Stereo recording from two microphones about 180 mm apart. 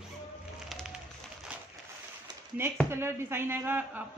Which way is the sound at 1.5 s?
5° right (ahead or behind).